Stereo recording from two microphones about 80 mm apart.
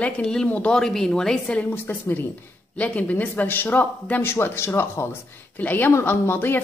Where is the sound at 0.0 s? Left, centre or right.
Centre.